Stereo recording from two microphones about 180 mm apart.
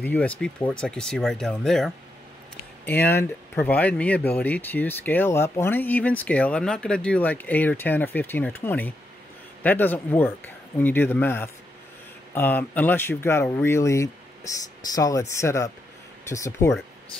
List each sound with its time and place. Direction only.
0.0 s speech: 10° left (ahead or behind)